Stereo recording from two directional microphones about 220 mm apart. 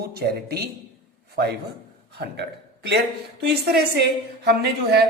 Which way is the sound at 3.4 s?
50° right (ahead or behind).